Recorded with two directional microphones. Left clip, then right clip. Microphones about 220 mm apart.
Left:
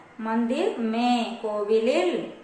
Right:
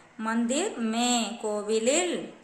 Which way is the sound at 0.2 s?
35° right (ahead or behind).